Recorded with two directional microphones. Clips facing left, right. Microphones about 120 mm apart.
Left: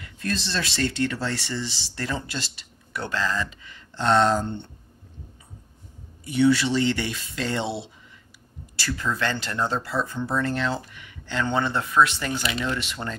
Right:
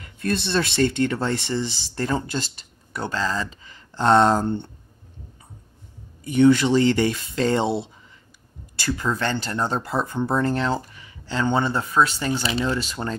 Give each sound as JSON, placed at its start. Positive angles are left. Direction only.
{"t": 0.0, "sound": "speech", "side_deg": -60}
{"t": 3.1, "sound": "speech", "side_deg": -35}
{"t": 6.2, "sound": "speech", "side_deg": -45}
{"t": 9.2, "sound": "speech", "side_deg": -25}
{"t": 9.8, "sound": "speech", "side_deg": -50}